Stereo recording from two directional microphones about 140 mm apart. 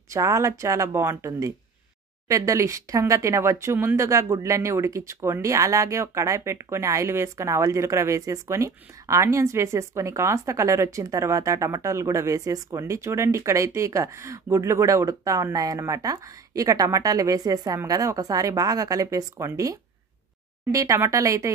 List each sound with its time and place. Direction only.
0.1 s speech: 20° right (ahead or behind)